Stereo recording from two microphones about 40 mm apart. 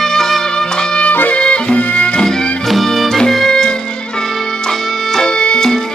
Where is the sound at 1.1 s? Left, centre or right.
Left.